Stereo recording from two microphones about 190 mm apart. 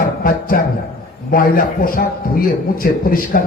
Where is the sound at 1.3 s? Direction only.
50° left (ahead or behind).